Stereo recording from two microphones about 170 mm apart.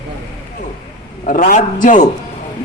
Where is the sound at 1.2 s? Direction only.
50° left (ahead or behind).